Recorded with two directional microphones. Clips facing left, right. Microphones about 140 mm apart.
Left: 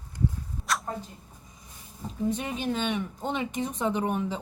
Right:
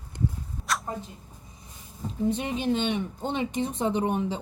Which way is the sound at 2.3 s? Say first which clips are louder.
Right 4 dB; 30° right (ahead or behind).